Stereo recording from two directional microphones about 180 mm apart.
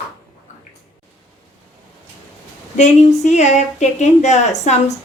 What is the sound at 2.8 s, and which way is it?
A woman's voice, 40° left (ahead or behind).